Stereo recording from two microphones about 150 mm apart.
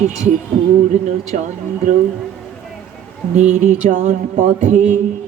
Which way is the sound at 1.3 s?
55° right (ahead or behind).